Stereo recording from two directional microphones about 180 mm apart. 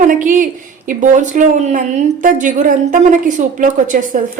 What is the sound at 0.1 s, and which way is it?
A woman's voice, 45° right (ahead or behind).